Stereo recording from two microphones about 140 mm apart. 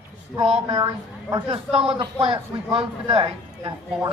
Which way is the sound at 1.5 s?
40° right (ahead or behind).